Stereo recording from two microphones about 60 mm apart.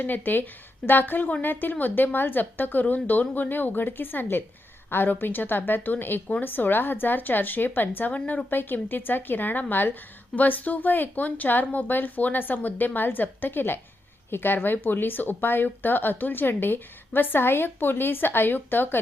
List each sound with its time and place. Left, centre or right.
0.0 s speech: left